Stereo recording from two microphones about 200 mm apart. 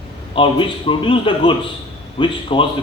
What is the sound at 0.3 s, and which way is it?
A man's voice, 25° left (ahead or behind).